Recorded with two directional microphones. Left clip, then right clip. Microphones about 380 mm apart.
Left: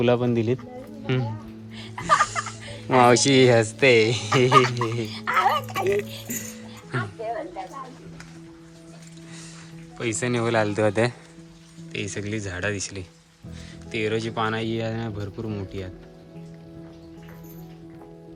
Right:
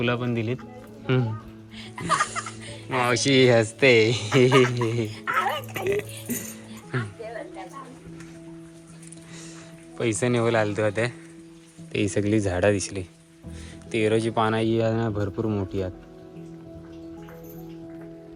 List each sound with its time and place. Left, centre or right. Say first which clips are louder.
0.0 s speech: left 5 dB; centre
1.7 s speech: left 4 dB; left; by 5.0 s centre
5.0 s a sound: left 7 dB; left
5.8 s speech: left 2 dB; centre
10.0 s speech: right 2 dB; centre